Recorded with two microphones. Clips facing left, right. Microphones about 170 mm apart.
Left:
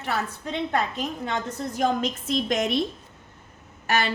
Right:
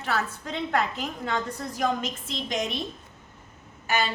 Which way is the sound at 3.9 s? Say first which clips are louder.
Left 2 dB; 70° left (ahead or behind).